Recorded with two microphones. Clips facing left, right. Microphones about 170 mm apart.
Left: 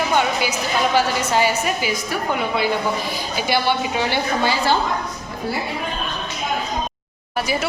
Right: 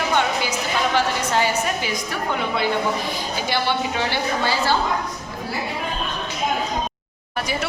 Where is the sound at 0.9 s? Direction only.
10° left (ahead or behind).